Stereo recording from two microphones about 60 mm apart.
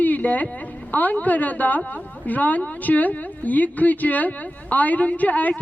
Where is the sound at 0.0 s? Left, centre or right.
Left.